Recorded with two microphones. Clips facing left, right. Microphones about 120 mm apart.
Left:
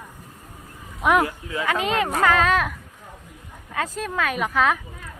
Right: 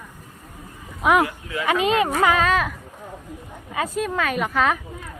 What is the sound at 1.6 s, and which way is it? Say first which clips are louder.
Speech: right 3 dB; 20° right (ahead or behind).